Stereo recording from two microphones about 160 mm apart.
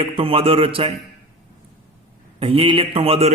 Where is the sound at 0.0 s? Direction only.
35° right (ahead or behind).